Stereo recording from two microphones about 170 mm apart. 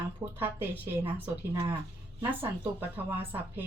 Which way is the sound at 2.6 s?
10° right (ahead or behind).